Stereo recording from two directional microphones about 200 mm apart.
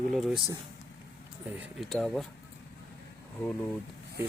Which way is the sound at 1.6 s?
Centre (ahead or behind).